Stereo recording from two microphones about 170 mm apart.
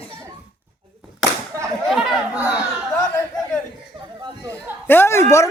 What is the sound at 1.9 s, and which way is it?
Chatter, 5° right (ahead or behind).